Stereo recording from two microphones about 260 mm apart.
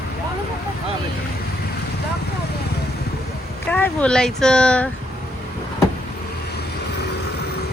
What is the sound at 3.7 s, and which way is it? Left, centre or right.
Speech, centre.